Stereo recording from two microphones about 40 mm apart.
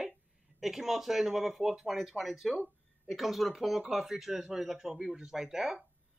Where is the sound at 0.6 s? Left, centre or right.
Centre.